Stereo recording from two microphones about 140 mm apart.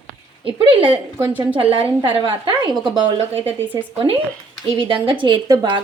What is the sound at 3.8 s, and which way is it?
A woman's voice, 40° right (ahead or behind).